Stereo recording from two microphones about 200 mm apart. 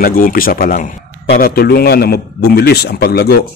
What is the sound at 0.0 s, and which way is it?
A man's voice, 45° left (ahead or behind).